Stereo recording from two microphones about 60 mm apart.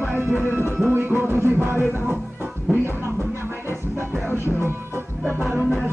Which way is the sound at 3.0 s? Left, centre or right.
Right.